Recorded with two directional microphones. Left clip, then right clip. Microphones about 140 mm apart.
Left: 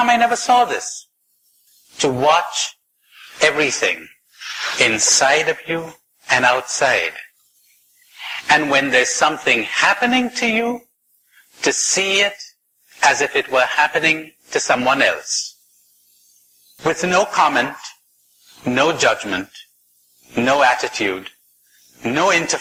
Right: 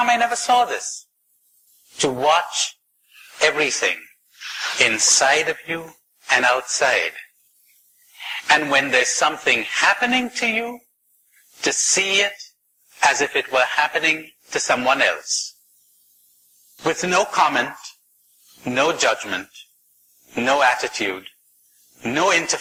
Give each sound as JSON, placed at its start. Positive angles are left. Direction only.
{"t": 0.0, "sound": "a man's voice", "side_deg": -40}
{"t": 2.0, "sound": "a man's voice", "side_deg": -40}
{"t": 8.4, "sound": "a man's voice", "side_deg": -40}
{"t": 16.7, "sound": "a man's voice", "side_deg": -40}